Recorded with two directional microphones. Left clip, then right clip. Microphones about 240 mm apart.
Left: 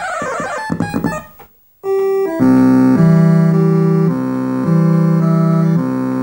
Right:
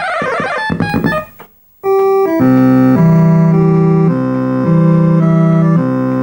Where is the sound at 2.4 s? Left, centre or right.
Left.